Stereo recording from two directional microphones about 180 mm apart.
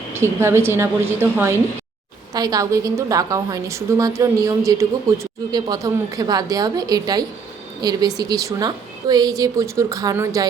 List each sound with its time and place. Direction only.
0.1 s a woman's voice: 15° right (ahead or behind)